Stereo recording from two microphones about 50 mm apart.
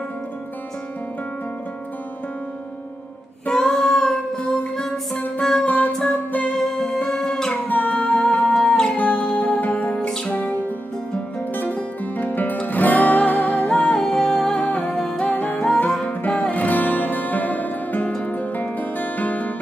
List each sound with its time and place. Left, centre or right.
3.4 s music: centre
5.7 s music: left
6.4 s music: centre
7.6 s music: left
8.6 s music: centre
8.9 s music: left
9.9 s music: centre
11.5 s music: left
13.7 s music: left
13.9 s music: centre
14.5 s music: left
15.0 s music: centre
15.2 s music: left